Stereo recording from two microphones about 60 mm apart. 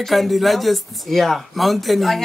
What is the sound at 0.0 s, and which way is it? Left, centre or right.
Speech, centre.